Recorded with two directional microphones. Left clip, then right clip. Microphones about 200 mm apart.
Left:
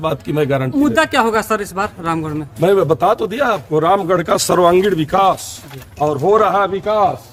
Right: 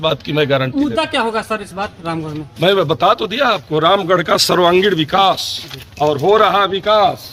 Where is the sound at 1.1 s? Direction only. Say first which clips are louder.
Left 3 dB; 25° left (ahead or behind).